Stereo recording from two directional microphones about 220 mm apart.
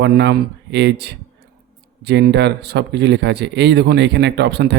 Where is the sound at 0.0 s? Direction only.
50° right (ahead or behind).